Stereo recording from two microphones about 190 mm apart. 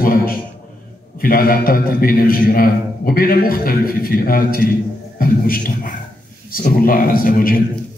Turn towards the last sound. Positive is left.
turn(degrees=50)  # may be behind; listen again after turning